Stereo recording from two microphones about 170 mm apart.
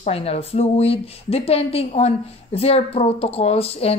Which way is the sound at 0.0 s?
35° left (ahead or behind).